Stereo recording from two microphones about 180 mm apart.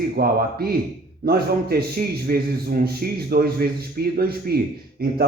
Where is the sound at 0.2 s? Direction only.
60° right (ahead or behind).